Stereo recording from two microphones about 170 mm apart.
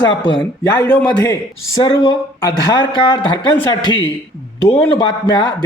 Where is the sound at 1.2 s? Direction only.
20° left (ahead or behind).